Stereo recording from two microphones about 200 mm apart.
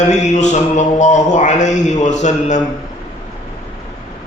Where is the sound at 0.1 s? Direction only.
35° left (ahead or behind).